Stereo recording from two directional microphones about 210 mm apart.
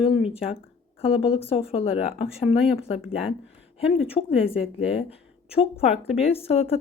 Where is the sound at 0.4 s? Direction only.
30° left (ahead or behind).